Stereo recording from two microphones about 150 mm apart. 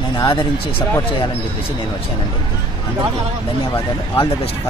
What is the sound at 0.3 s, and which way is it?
Speech, 35° left (ahead or behind).